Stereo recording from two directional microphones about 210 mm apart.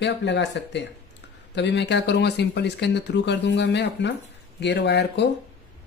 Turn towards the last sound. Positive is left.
turn(degrees=55)  # may be behind; listen again after turning